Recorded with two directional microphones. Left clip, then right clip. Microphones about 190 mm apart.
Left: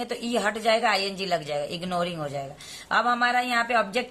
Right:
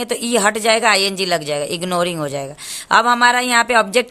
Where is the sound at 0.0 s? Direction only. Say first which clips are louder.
Right 10 dB; 50° right (ahead or behind).